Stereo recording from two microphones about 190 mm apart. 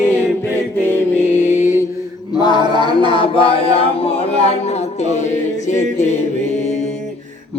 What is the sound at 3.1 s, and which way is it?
Chant, 30° left (ahead or behind).